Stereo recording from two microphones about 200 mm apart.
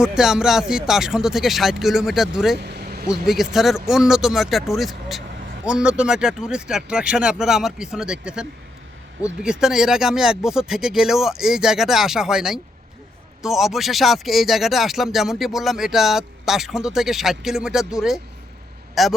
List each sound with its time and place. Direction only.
0.0 s speech: 5° right (ahead or behind)
2.6 s vehicle: 55° right (ahead or behind)
3.2 s speech: centre (ahead or behind)